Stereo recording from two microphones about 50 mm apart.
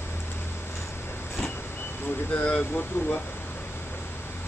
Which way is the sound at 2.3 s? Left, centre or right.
Left.